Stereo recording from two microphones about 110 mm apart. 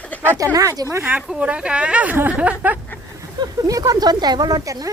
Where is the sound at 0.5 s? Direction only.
30° right (ahead or behind).